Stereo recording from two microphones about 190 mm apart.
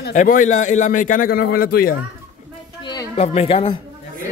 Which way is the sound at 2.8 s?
25° left (ahead or behind).